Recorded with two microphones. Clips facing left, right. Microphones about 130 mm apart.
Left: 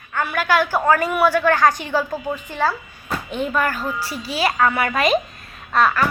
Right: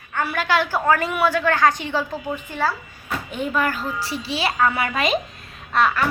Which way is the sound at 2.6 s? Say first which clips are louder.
Left 3 dB; 30° left (ahead or behind).